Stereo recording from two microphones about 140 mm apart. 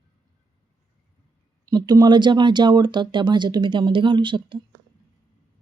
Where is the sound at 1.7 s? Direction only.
30° right (ahead or behind).